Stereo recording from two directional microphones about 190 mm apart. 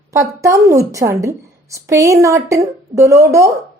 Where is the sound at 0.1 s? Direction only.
15° right (ahead or behind).